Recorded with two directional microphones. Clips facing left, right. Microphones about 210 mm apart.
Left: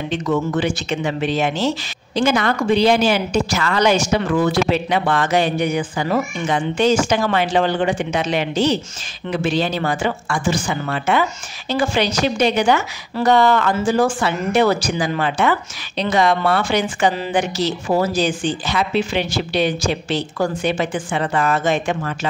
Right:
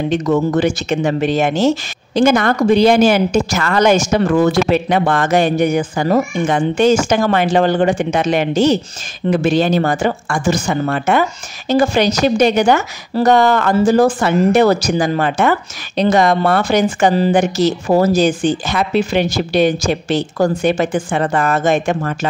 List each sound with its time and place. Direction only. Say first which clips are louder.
0.1 s speech: right 4 dB; 40° right (ahead or behind)